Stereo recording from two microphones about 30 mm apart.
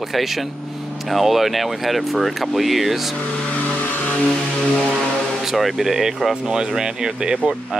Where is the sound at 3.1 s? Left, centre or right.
Left.